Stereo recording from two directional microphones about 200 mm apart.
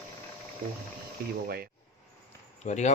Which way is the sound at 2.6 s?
35° left (ahead or behind).